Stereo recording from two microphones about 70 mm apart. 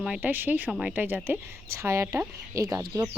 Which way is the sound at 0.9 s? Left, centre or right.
Right.